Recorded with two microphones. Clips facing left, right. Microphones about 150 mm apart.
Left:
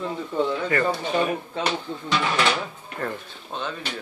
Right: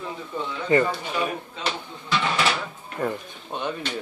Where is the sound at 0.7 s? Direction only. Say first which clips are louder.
Right 7 dB; 25° right (ahead or behind).